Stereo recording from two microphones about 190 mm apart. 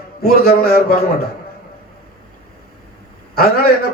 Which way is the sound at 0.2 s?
55° left (ahead or behind).